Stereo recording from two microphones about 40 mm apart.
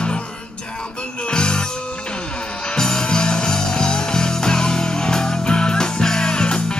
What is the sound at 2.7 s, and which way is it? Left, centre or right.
Music, centre.